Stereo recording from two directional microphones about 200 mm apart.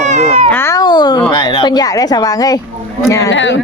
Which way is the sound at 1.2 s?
20° left (ahead or behind).